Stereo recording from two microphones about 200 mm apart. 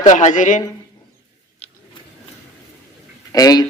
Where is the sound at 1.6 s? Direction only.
30° left (ahead or behind).